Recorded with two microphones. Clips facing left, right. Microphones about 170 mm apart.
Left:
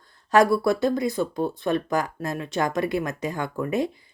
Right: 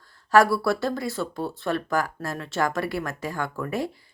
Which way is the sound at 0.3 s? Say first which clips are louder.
Left 1 dB; 20° left (ahead or behind).